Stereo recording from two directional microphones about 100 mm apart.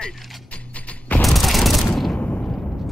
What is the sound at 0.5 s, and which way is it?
Music, 15° left (ahead or behind).